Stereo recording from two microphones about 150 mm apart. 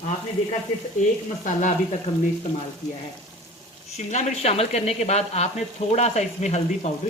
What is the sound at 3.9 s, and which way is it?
Speech, 50° left (ahead or behind).